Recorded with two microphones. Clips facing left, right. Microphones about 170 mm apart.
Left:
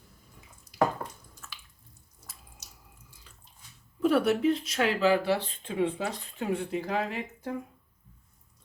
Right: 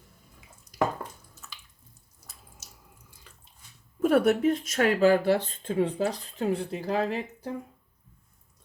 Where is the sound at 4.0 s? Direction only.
50° right (ahead or behind).